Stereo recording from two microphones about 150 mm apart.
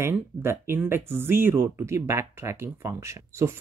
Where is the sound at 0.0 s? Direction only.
15° right (ahead or behind).